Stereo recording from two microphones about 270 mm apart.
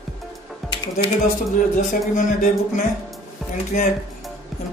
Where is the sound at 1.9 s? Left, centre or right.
Left.